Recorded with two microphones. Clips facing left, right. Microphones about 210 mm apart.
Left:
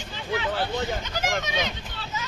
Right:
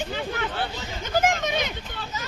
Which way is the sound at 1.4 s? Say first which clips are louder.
Right 3 dB; 55° right (ahead or behind).